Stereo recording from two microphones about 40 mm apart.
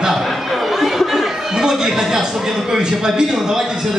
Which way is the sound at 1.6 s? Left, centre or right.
Centre.